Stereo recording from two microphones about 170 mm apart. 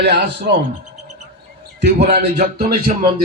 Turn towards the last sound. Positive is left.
turn(degrees=-50)  # may be behind; listen again after turning